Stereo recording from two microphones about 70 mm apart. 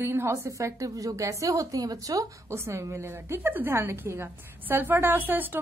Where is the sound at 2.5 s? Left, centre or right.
Right.